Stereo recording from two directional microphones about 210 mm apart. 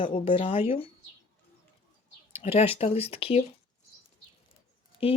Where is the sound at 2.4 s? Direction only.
30° left (ahead or behind).